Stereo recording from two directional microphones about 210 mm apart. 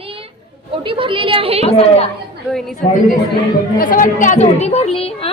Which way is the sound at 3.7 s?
40° left (ahead or behind).